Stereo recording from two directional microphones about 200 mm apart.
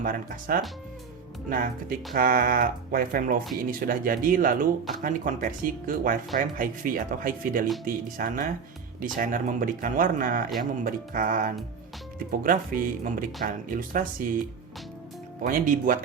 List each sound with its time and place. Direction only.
0.0 s speech: 45° right (ahead or behind)
15.4 s speech: 40° right (ahead or behind)